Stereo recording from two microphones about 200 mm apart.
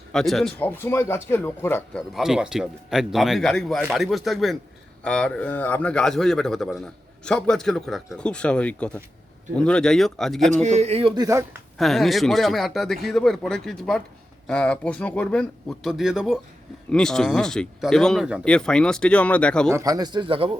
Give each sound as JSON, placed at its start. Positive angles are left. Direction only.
{"t": 0.1, "sound": "speech", "side_deg": 0}
{"t": 2.1, "sound": "a man's voice", "side_deg": -5}
{"t": 10.5, "sound": "speech", "side_deg": -35}
{"t": 11.8, "sound": "a man's voice", "side_deg": 0}
{"t": 19.7, "sound": "speech", "side_deg": -15}